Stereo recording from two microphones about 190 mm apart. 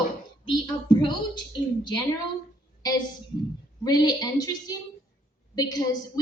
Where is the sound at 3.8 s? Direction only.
20° left (ahead or behind).